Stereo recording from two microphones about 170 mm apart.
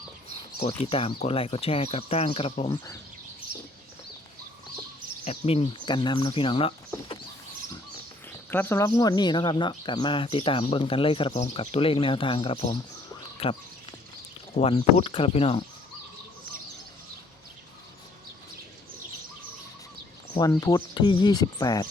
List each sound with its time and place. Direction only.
0.6 s speech: 35° left (ahead or behind)
2.6 s speech: 20° left (ahead or behind)
5.2 s speech: 35° left (ahead or behind)
8.4 s speech: 15° left (ahead or behind); by 13.6 s 35° left (ahead or behind)
14.6 s speech: 35° left (ahead or behind)
20.5 s speech: 20° left (ahead or behind)